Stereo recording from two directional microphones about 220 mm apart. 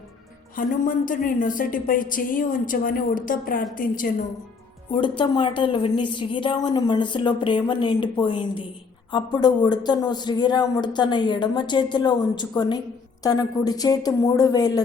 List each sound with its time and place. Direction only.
0.5 s a woman's voice: 40° left (ahead or behind)
4.9 s a man's voice: 20° left (ahead or behind)